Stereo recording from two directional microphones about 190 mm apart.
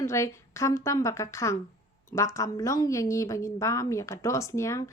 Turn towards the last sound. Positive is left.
turn(degrees=15)  # may be behind; listen again after turning